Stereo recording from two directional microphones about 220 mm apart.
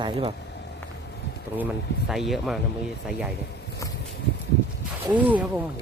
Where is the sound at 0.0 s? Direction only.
25° right (ahead or behind).